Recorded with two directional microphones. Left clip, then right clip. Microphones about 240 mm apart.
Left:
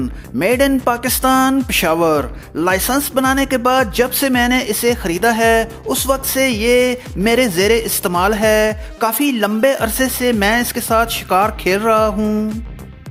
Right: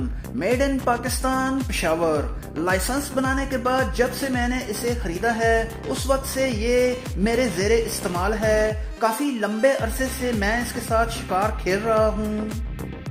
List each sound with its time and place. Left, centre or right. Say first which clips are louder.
0.3 s speech: left 8 dB; left